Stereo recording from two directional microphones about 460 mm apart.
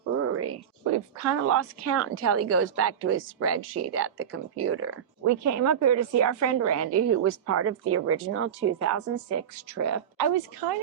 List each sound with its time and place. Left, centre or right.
0.2 s speech: right